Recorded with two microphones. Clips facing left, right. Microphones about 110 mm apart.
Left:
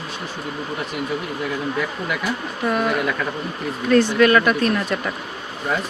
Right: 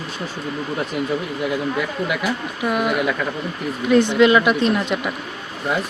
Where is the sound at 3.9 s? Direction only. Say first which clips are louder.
Right 1 dB; 20° right (ahead or behind).